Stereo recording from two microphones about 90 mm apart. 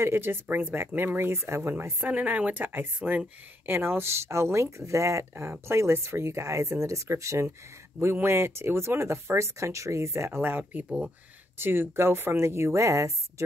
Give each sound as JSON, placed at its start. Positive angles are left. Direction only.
{"t": 0.0, "sound": "speech", "side_deg": -25}